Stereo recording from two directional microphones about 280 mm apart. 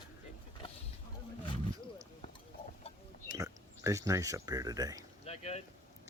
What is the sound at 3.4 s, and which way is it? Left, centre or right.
Speech, centre.